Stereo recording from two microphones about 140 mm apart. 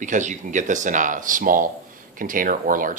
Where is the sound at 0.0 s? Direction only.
65° right (ahead or behind).